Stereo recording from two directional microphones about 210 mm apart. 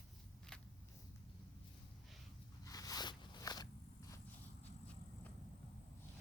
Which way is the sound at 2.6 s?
15° left (ahead or behind).